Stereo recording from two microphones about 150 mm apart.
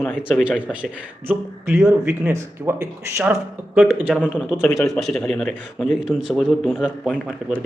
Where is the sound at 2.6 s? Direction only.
15° right (ahead or behind).